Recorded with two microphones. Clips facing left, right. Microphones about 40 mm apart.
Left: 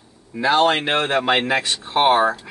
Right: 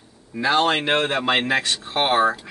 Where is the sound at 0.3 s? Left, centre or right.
Centre.